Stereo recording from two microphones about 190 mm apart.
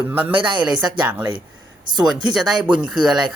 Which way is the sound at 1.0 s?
10° right (ahead or behind).